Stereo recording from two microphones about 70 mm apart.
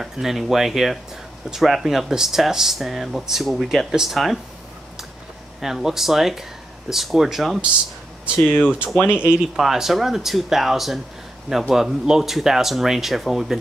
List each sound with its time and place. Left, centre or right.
0.0 s speech: centre
5.6 s speech: centre
8.6 s speech: centre
9.0 s speech: left
9.6 s speech: centre